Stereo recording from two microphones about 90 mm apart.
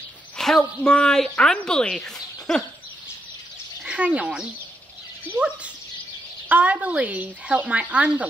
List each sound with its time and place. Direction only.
0.4 s a woman's voice: 5° left (ahead or behind)
3.8 s speech: 15° right (ahead or behind)
6.5 s speech: 15° right (ahead or behind)